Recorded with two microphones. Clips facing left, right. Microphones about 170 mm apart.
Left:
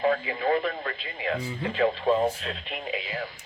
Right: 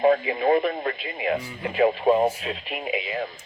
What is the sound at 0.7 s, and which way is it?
Speech, 30° right (ahead or behind).